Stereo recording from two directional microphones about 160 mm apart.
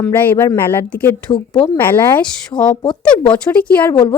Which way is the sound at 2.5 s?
25° left (ahead or behind).